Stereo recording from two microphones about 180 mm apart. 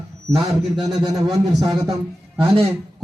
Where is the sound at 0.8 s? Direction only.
20° right (ahead or behind).